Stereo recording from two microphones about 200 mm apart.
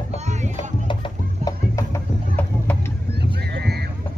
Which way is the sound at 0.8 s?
20° left (ahead or behind).